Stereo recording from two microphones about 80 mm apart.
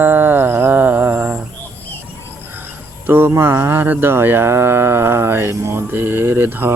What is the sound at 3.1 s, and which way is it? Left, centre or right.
Speech, right.